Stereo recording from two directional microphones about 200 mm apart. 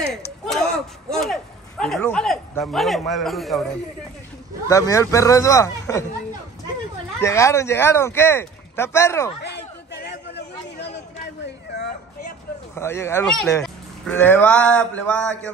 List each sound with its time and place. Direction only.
0.1 s speech: centre (ahead or behind)
4.6 s speech: 15° left (ahead or behind)
7.2 s speech: 15° left (ahead or behind)
9.4 s chatter: 60° left (ahead or behind)
12.7 s speech: 15° left (ahead or behind)
14.0 s a sound: 10° left (ahead or behind)